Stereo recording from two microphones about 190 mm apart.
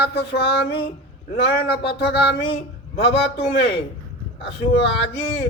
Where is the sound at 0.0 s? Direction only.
60° left (ahead or behind).